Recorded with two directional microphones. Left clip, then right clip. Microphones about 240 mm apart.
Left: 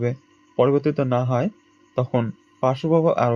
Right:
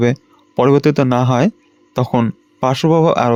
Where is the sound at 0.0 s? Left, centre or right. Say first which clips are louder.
Right 10 dB; right.